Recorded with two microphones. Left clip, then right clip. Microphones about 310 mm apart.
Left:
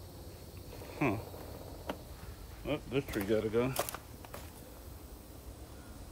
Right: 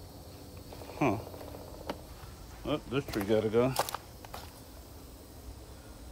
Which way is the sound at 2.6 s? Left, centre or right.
Centre.